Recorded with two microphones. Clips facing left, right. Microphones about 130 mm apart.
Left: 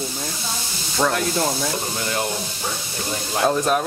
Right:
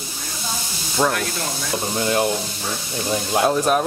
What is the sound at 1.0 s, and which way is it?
Speech, 5° right (ahead or behind).